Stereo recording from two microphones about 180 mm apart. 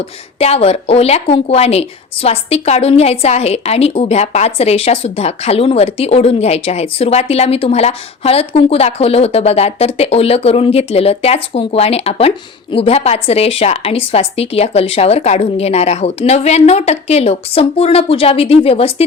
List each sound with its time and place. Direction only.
0.3 s a woman's voice: 35° left (ahead or behind)